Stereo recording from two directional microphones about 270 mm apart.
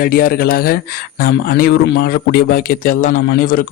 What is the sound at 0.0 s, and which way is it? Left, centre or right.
Speech, left.